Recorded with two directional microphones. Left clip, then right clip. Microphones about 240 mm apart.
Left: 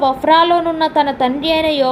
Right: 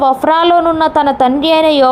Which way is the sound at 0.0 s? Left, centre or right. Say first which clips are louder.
Right 2 dB; right.